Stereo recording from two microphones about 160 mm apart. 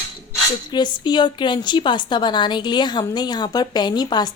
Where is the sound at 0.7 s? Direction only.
30° left (ahead or behind).